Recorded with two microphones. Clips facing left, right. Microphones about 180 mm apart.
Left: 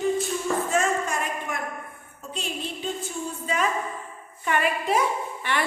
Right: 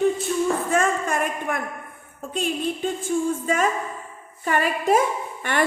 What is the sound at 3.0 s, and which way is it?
A woman's voice, 45° right (ahead or behind).